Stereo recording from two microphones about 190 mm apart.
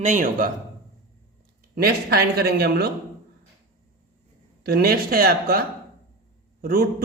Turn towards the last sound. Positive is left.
turn(degrees=-50)  # may be behind; listen again after turning